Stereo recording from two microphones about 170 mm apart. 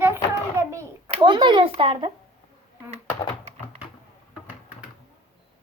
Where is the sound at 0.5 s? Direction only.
15° right (ahead or behind).